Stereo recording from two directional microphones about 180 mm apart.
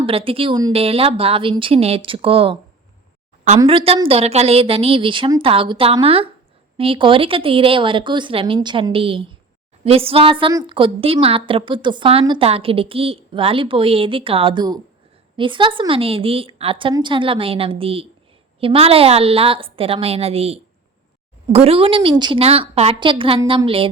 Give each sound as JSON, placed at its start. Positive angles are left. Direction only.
{"t": 0.0, "sound": "a woman's voice", "side_deg": -30}
{"t": 3.7, "sound": "a woman's voice", "side_deg": -30}